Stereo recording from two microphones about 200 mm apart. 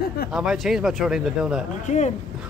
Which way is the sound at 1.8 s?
35° left (ahead or behind).